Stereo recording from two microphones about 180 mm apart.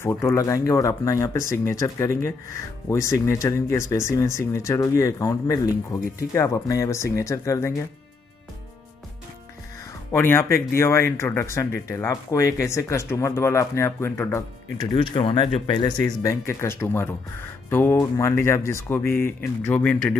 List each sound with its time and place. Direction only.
0.0 s speech: 15° left (ahead or behind)
10.1 s speech: 10° left (ahead or behind)
14.8 s speech: 30° left (ahead or behind); by 20.2 s 10° left (ahead or behind)